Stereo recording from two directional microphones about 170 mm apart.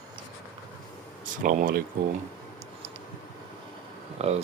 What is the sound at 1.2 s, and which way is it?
Speech, 50° right (ahead or behind).